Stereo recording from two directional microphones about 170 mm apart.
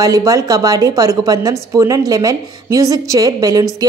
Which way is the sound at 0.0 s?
20° right (ahead or behind).